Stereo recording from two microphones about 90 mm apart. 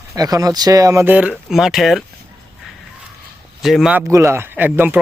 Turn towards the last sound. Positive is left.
turn(degrees=-20)  # may be behind; listen again after turning